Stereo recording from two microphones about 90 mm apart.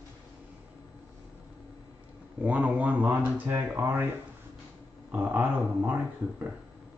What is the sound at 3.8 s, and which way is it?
Speech, 25° right (ahead or behind).